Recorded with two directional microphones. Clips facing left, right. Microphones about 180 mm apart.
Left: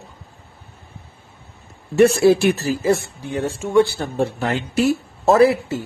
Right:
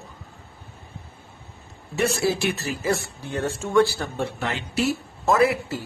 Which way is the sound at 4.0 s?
40° left (ahead or behind).